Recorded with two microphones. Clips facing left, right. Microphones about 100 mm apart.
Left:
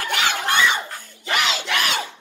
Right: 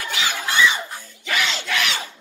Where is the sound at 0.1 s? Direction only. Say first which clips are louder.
Left 4 dB; 60° left (ahead or behind).